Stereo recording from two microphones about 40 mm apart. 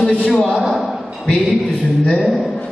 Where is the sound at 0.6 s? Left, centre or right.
Centre.